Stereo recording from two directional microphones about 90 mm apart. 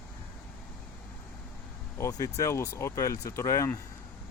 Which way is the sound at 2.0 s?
40° left (ahead or behind).